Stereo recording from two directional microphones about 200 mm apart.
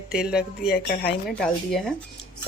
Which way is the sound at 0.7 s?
50° left (ahead or behind).